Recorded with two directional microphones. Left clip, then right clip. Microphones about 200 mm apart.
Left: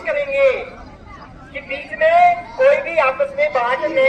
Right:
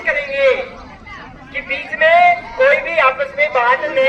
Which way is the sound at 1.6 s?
10° right (ahead or behind).